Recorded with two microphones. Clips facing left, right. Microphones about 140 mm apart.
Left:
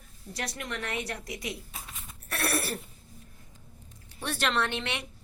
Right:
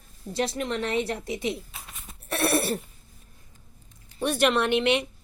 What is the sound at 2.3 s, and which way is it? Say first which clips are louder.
Cough: right 7 dB; 25° right (ahead or behind).